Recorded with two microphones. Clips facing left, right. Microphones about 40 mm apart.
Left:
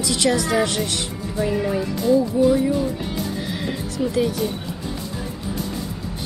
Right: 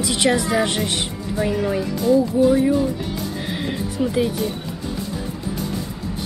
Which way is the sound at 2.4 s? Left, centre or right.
Centre.